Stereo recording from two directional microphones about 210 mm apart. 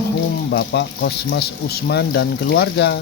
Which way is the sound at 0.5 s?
55° left (ahead or behind).